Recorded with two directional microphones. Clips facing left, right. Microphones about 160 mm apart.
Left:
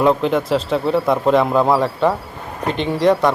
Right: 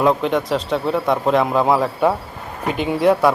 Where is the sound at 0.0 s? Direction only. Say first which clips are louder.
Left 1 dB; centre (ahead or behind).